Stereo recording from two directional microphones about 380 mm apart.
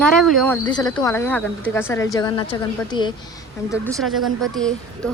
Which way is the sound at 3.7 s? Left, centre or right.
Centre.